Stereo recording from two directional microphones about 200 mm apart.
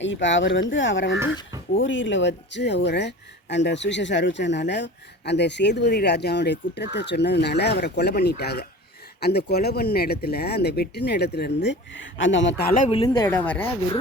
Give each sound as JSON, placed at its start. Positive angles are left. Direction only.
{"t": 0.0, "sound": "speech", "side_deg": 70}
{"t": 12.9, "sound": "speech", "side_deg": 25}
{"t": 13.2, "sound": "speech", "side_deg": 10}